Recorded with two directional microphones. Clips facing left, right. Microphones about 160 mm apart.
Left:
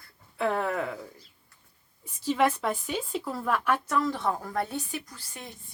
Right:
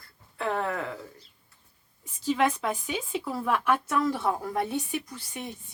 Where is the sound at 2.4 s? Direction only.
5° left (ahead or behind); by 5.5 s 15° right (ahead or behind).